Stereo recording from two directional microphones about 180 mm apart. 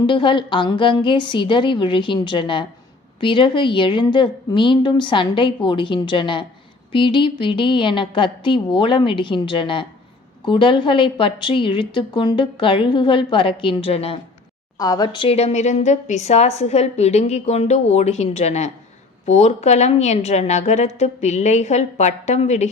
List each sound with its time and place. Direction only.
0.0 s a woman's voice: 25° left (ahead or behind)
14.8 s speech: 20° left (ahead or behind); by 22.7 s 40° left (ahead or behind)